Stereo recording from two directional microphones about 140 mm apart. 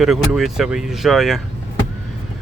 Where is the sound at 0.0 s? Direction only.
Centre (ahead or behind).